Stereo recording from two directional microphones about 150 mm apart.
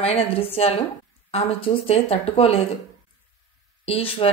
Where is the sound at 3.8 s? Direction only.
40° left (ahead or behind).